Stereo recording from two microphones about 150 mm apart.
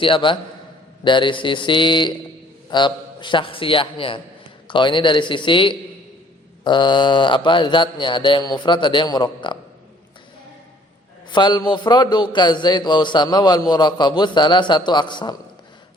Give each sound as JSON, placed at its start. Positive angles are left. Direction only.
{"t": 0.0, "sound": "mantra", "side_deg": 35}
{"t": 11.3, "sound": "a man's voice", "side_deg": 30}